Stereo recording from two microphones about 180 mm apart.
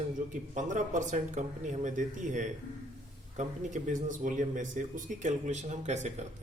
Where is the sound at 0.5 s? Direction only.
45° right (ahead or behind).